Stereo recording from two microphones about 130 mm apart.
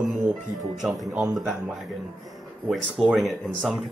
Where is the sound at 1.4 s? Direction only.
Centre (ahead or behind).